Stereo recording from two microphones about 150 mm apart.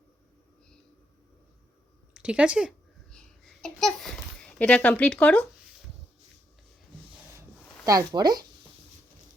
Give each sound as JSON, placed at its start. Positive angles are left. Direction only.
{"t": 2.1, "sound": "speech", "side_deg": -5}
{"t": 3.1, "sound": "babbling", "side_deg": 5}
{"t": 7.9, "sound": "speech", "side_deg": -25}